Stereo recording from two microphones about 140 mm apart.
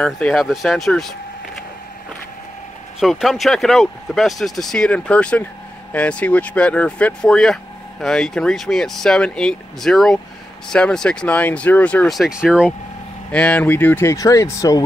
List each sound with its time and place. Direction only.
0.0 s speech: centre (ahead or behind)
3.0 s speech: centre (ahead or behind)
13.3 s speech: 10° left (ahead or behind); by 14.8 s 25° left (ahead or behind)